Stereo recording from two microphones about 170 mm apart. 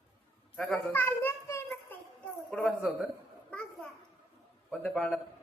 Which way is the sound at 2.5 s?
5° left (ahead or behind).